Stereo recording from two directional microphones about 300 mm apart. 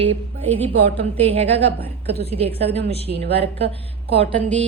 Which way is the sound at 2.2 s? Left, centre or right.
Centre.